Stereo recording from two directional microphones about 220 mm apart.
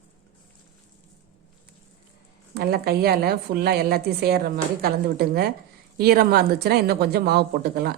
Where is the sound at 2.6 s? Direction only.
45° right (ahead or behind).